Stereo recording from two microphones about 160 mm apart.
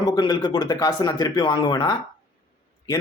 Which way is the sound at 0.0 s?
25° left (ahead or behind).